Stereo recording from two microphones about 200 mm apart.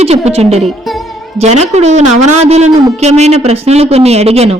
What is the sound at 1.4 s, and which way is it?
A woman's voice, 35° right (ahead or behind).